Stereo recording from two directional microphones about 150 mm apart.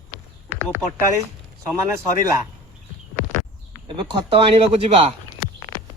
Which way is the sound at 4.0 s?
30° right (ahead or behind).